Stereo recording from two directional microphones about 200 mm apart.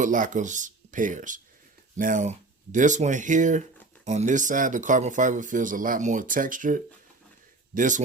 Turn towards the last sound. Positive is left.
turn(degrees=-40)  # may be behind; listen again after turning